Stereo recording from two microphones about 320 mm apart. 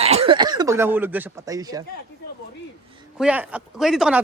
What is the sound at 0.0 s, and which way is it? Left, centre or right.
Speech, centre.